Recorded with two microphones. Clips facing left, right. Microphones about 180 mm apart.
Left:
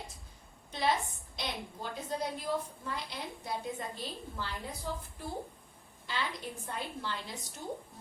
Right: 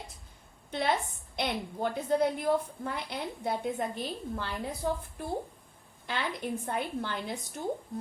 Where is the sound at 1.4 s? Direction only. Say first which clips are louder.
Right 8 dB; 60° right (ahead or behind).